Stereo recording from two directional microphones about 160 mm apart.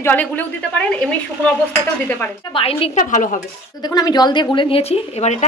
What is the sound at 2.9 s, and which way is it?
Speech, 55° left (ahead or behind).